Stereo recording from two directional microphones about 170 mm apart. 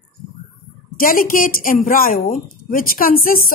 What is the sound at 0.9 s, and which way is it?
Speech, 55° left (ahead or behind).